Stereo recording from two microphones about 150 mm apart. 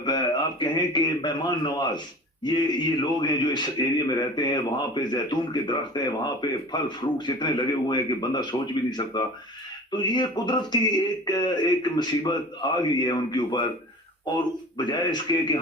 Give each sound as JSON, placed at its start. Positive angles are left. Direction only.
{"t": 0.0, "sound": "a man's voice", "side_deg": 30}